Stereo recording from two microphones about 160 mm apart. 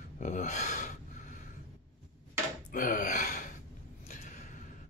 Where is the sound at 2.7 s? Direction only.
55° left (ahead or behind).